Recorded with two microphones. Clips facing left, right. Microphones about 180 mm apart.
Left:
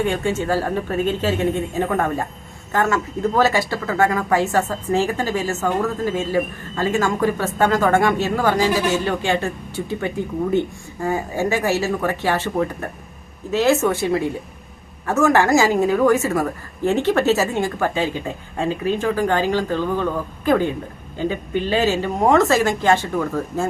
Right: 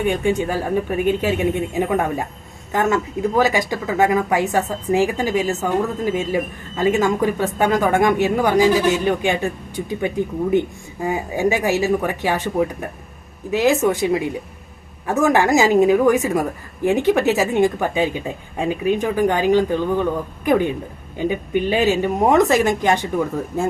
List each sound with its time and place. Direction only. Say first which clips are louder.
0.0 s speech: right 2 dB; 15° right (ahead or behind)